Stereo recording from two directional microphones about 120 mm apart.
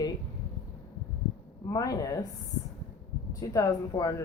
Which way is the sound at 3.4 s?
35° left (ahead or behind).